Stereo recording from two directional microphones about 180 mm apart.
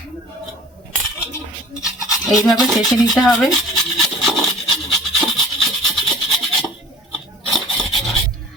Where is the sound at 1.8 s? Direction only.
Centre (ahead or behind).